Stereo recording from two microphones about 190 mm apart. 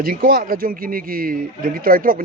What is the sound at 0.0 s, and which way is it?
A man's voice, 50° right (ahead or behind).